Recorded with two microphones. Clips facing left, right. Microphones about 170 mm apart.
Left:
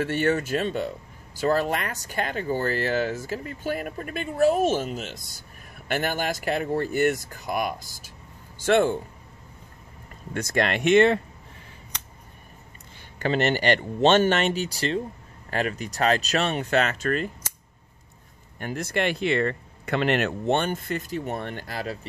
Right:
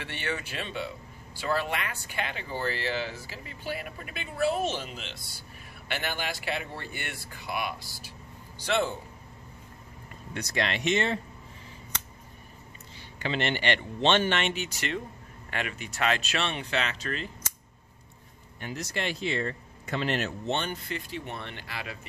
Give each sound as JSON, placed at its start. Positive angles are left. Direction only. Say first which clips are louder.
{"t": 0.0, "sound": "speech", "louder": "left 11 dB", "side_deg": 45}
{"t": 10.3, "sound": "speech", "louder": "left 6 dB", "side_deg": 50}
{"t": 13.2, "sound": "speech", "louder": "left 6 dB", "side_deg": 45}
{"t": 18.6, "sound": "speech", "louder": "left 7 dB", "side_deg": 50}